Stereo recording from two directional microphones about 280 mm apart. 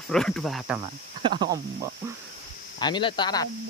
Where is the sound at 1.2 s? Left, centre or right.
Centre.